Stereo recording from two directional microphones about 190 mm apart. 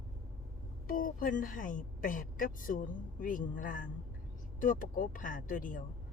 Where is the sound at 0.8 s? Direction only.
50° left (ahead or behind).